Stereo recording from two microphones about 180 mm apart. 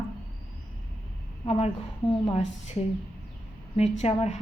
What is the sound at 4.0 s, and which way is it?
Speech, 35° left (ahead or behind).